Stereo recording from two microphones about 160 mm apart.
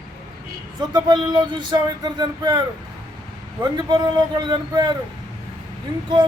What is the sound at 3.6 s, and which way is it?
Speech, 25° right (ahead or behind).